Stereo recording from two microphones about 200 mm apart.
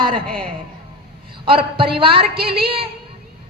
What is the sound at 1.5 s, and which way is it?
A woman's voice, 25° right (ahead or behind).